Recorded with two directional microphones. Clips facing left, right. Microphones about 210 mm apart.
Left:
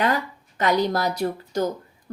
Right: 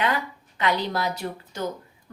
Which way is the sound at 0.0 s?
40° left (ahead or behind).